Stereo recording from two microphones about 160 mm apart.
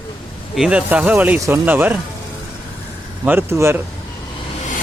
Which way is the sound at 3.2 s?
15° right (ahead or behind).